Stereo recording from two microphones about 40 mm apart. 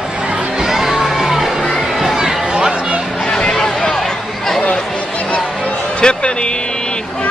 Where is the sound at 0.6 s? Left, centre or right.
Centre.